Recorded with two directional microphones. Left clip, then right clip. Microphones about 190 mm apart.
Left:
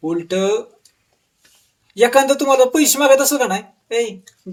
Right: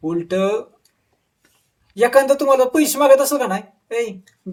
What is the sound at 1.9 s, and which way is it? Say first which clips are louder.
Speech: left 1 dB; 15° left (ahead or behind).